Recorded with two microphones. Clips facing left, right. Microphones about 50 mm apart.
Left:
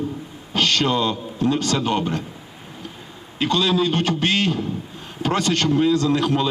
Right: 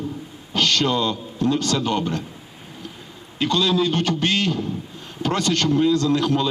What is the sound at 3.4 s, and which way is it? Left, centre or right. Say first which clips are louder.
A man's voice: even; left.